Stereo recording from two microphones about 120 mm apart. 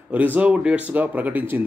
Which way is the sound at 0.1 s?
15° right (ahead or behind).